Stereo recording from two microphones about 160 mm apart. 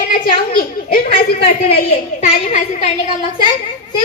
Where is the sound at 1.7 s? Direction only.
50° left (ahead or behind).